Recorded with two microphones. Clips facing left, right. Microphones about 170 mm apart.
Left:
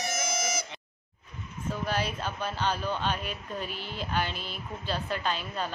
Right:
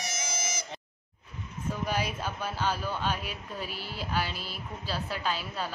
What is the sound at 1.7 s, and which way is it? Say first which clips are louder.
Speech: left 1 dB; 10° right (ahead or behind).